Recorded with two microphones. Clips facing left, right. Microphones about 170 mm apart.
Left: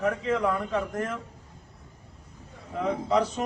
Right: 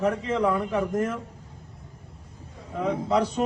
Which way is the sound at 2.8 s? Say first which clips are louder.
Right 1 dB; 10° right (ahead or behind).